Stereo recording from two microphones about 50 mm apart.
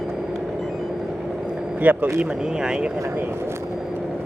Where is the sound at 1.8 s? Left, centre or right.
Right.